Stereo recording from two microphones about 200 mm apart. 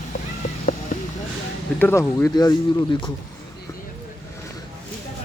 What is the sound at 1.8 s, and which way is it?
Speech, 10° left (ahead or behind).